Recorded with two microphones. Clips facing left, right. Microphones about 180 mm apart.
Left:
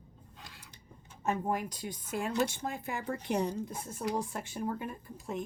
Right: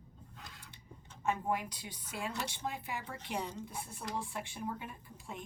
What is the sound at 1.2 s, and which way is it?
Speech, 45° left (ahead or behind).